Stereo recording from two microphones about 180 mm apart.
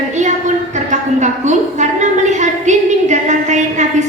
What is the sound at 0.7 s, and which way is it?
A woman's voice, 40° right (ahead or behind).